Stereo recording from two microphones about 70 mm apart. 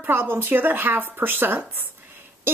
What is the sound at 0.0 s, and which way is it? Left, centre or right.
A woman's voice, right.